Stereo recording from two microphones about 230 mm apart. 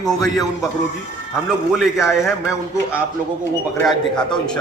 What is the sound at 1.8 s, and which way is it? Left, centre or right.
Speech, centre.